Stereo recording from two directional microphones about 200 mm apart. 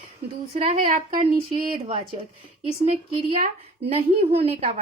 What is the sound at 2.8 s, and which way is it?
A woman's voice, 35° right (ahead or behind).